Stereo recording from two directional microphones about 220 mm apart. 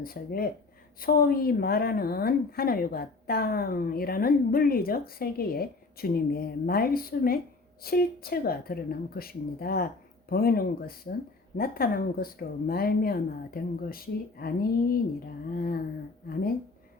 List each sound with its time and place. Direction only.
0.0 s a woman's voice: 40° left (ahead or behind)